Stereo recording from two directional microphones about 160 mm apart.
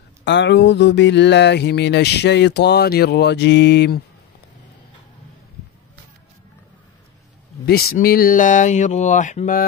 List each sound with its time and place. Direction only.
0.2 s mantra: 90° left
7.6 s speech: 70° left (ahead or behind); by 9.7 s 55° left (ahead or behind)